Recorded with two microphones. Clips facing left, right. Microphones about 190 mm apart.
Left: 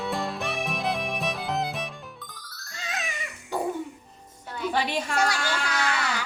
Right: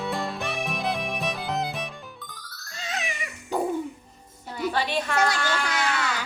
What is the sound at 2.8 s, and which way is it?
Cat, 15° right (ahead or behind).